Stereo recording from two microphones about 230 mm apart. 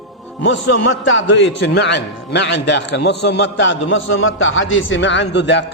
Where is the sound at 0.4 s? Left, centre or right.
Left.